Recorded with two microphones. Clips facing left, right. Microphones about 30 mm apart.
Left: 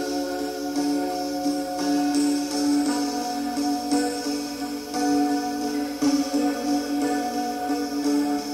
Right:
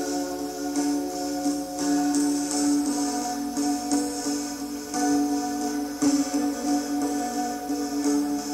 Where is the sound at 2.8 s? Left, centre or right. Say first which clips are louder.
Left 2 dB; left.